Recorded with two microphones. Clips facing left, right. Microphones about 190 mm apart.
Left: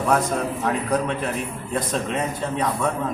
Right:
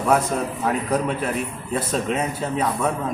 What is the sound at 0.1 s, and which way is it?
A man's voice, 5° right (ahead or behind).